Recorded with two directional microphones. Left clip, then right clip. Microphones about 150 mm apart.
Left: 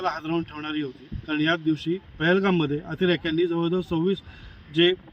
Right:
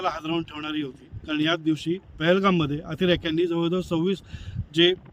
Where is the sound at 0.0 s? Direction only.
40° right (ahead or behind).